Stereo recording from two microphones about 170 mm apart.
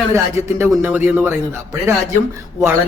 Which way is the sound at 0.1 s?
15° right (ahead or behind).